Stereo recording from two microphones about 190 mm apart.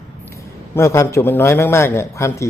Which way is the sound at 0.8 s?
15° left (ahead or behind).